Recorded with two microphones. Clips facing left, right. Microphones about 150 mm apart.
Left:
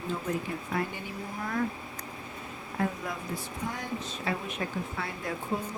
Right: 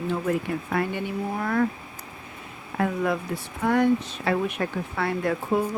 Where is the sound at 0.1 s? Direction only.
65° right (ahead or behind).